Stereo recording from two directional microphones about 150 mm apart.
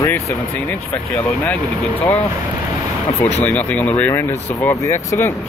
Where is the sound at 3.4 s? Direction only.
10° left (ahead or behind).